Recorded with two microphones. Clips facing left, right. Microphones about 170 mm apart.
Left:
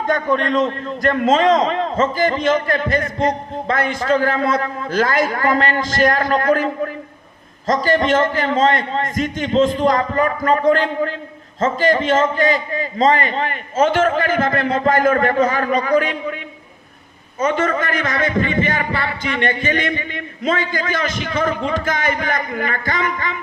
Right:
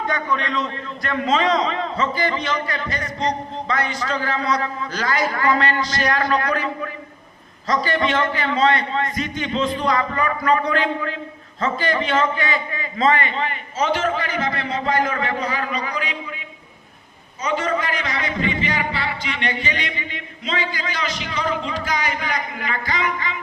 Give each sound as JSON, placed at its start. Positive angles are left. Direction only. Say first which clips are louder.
{"t": 0.1, "sound": "a man's voice", "louder": "left 10 dB", "side_deg": 45}
{"t": 17.4, "sound": "a man's voice", "louder": "left 4 dB", "side_deg": 50}